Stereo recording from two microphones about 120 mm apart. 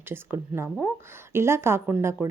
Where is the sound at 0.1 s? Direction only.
20° right (ahead or behind).